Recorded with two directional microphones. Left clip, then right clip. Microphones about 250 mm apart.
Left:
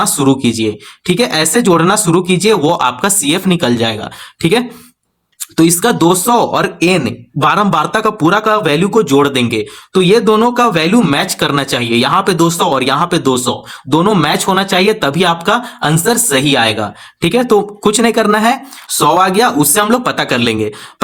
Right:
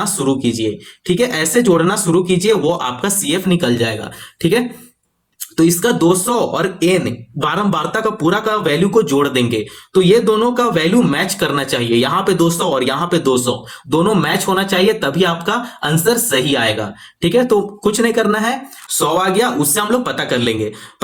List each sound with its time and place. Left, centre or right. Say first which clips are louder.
0.0 s speech: left 5 dB; left